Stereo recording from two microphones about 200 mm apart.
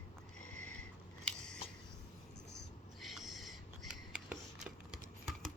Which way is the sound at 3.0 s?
Centre (ahead or behind).